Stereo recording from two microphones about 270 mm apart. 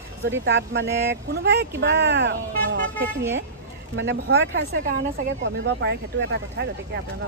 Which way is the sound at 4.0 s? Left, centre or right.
Right.